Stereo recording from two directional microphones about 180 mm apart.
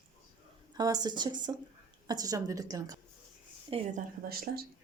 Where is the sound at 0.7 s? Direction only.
20° right (ahead or behind).